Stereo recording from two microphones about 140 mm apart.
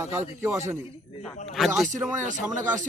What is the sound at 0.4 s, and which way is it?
Speech, 15° right (ahead or behind).